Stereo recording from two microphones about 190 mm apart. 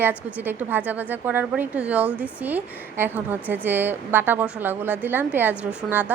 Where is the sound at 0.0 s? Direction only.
10° right (ahead or behind).